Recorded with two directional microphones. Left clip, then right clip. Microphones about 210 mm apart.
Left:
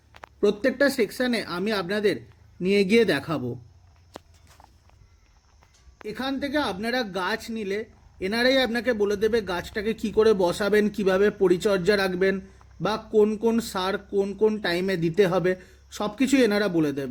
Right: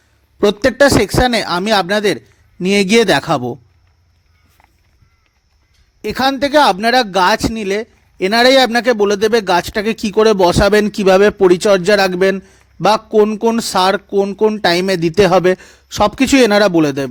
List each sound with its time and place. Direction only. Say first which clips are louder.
0.3 s speech: right 11 dB; 40° right (ahead or behind)
6.1 s speech: right 15 dB; 45° right (ahead or behind)